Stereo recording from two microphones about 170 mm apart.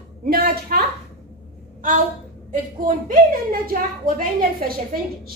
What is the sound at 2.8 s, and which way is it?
A woman's voice, 55° right (ahead or behind).